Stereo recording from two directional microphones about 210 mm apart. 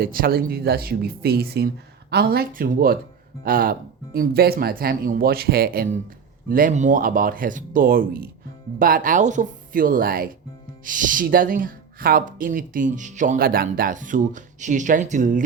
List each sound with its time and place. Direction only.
0.0 s speech: 45° right (ahead or behind)